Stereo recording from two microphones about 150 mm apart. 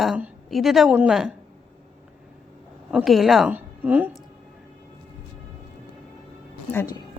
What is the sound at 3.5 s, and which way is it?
Speech, 10° right (ahead or behind).